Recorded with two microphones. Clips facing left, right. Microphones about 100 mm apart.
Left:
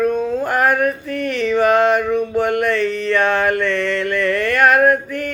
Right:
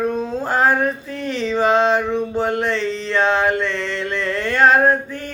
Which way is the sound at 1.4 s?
20° right (ahead or behind).